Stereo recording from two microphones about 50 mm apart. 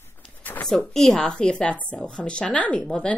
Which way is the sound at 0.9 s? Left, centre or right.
Centre.